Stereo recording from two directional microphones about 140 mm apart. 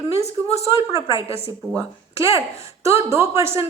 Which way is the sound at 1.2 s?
45° left (ahead or behind).